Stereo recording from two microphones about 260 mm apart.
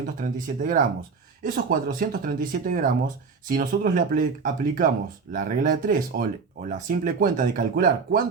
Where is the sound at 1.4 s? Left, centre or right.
Right.